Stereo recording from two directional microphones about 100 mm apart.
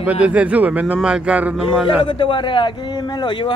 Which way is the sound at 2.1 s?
60° left (ahead or behind).